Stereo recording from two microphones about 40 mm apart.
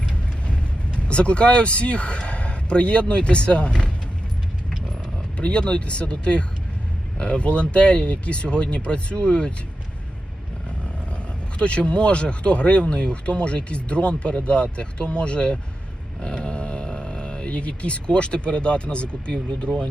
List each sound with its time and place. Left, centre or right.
0.0 s vehicle: left
0.9 s speech: left
5.4 s speech: left
11.6 s speech: left
16.2 s a sound: left
16.8 s speech: centre